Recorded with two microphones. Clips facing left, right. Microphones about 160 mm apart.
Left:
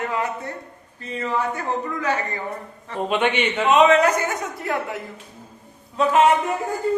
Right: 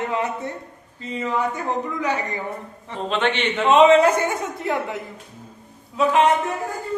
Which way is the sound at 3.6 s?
25° right (ahead or behind).